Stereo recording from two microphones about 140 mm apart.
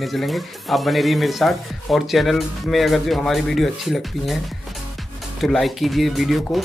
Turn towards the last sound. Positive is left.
turn(degrees=0)  # may be behind; listen again after turning